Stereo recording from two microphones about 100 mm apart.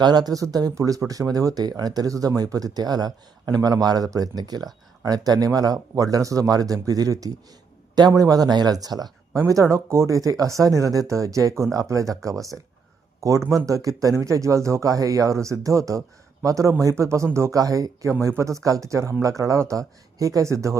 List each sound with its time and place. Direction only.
0.0 s speech: 40° right (ahead or behind)